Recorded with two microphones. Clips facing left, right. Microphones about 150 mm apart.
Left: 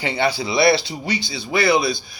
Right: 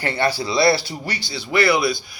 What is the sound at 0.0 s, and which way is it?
Speech, 15° left (ahead or behind).